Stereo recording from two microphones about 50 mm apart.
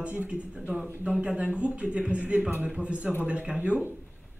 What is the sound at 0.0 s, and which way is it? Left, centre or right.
Speech, right.